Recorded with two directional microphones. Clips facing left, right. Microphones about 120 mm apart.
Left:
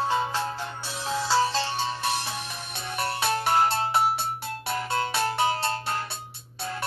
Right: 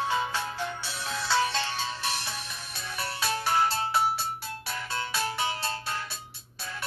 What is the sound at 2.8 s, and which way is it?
Music, 55° left (ahead or behind).